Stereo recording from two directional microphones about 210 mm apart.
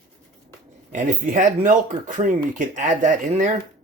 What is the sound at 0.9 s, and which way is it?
Speech, 40° right (ahead or behind).